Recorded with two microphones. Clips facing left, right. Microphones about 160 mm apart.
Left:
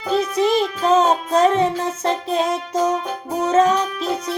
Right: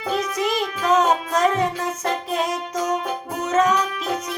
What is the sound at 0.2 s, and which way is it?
Music, 30° left (ahead or behind).